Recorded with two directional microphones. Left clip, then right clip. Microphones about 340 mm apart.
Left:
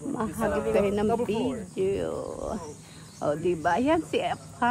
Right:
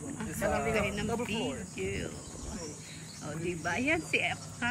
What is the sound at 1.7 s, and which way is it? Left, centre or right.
Speech, centre.